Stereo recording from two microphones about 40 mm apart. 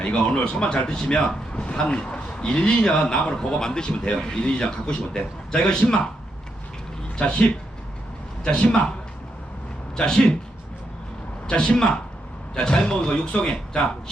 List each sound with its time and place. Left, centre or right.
0.0 s a man's voice: left
7.2 s a man's voice: left
8.4 s a man's voice: left
11.4 s a man's voice: left